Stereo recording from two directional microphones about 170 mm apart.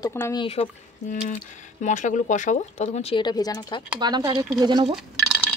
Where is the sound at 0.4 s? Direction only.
35° left (ahead or behind).